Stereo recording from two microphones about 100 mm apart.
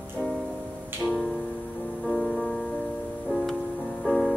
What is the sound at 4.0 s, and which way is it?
Music, 5° left (ahead or behind).